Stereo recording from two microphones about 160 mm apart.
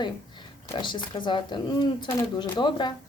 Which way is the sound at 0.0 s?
30° left (ahead or behind).